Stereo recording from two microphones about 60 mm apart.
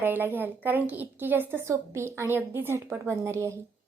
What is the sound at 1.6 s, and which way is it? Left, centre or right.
A woman's voice, right.